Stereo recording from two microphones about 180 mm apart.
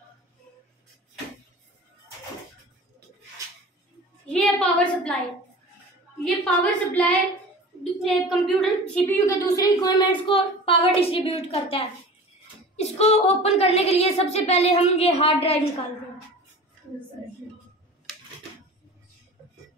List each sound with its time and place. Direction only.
4.3 s a sound: 5° left (ahead or behind)
6.2 s speech: 5° left (ahead or behind)
9.0 s a woman's voice: 15° left (ahead or behind); by 15.5 s 35° left (ahead or behind)